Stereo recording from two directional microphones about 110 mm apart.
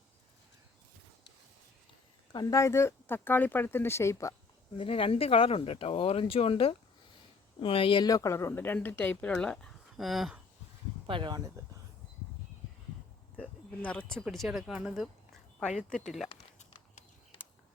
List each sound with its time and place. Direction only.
2.3 s speech: 35° left (ahead or behind)
4.8 s speech: 55° left (ahead or behind)
8.0 s speech: 30° left (ahead or behind); by 10.4 s centre (ahead or behind)
11.0 s speech: 45° right (ahead or behind)
13.4 s speech: 10° left (ahead or behind)
14.3 s speech: 5° right (ahead or behind)